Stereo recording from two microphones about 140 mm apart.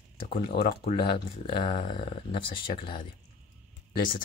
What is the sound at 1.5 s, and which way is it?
Speech, 40° left (ahead or behind).